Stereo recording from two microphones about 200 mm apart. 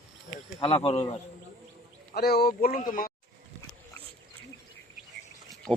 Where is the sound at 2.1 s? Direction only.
50° left (ahead or behind).